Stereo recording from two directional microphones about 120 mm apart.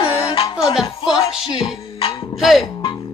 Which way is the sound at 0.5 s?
5° right (ahead or behind).